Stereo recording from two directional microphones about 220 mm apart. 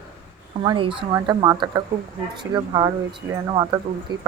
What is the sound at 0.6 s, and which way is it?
Speech, 25° right (ahead or behind).